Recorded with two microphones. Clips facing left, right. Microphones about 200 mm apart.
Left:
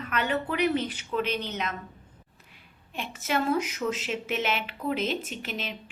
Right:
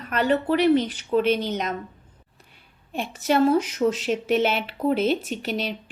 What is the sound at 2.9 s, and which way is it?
Speech, 35° right (ahead or behind).